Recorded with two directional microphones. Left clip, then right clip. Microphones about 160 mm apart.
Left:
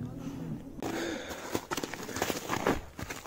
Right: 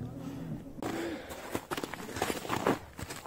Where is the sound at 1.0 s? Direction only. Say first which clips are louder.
Left 2 dB; 40° left (ahead or behind).